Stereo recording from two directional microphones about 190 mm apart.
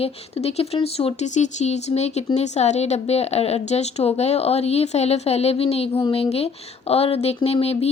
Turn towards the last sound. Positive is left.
turn(degrees=30)  # may be behind; listen again after turning